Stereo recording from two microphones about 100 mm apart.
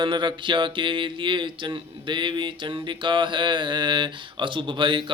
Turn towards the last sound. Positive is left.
turn(degrees=-55)  # may be behind; listen again after turning